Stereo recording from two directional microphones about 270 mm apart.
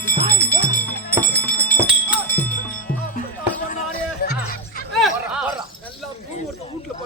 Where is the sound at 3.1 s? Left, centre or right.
Left.